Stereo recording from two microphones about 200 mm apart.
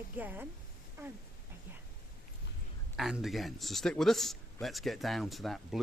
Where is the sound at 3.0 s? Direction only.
Centre (ahead or behind).